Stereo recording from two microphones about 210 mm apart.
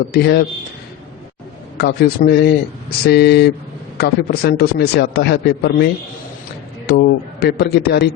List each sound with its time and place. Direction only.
0.1 s a man's voice: 50° left (ahead or behind)
1.8 s a man's voice: 50° left (ahead or behind)